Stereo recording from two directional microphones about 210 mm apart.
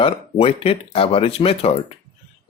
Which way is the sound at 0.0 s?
25° left (ahead or behind).